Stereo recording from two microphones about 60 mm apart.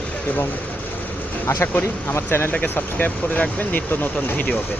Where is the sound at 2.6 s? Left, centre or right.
Left.